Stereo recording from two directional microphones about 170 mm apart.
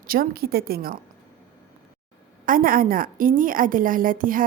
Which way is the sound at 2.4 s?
55° right (ahead or behind).